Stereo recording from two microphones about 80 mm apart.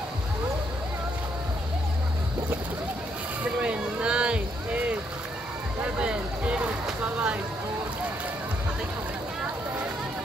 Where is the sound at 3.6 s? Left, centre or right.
Centre.